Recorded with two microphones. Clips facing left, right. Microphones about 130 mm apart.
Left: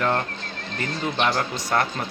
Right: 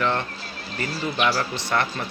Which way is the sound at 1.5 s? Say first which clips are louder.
Left 1 dB; 45° left (ahead or behind).